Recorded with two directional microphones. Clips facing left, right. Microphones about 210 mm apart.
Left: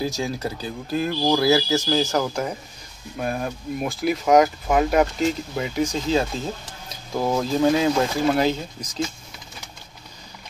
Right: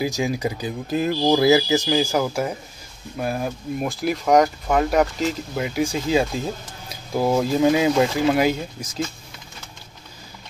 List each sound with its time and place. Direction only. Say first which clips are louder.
0.0 s speech: right 3 dB; 15° right (ahead or behind)